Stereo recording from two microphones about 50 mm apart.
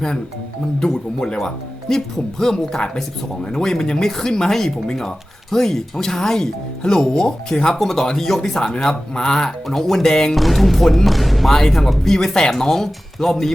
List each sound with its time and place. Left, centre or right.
0.8 s speech: centre
9.6 s speech: centre
10.1 s speech: centre
10.3 s speech: centre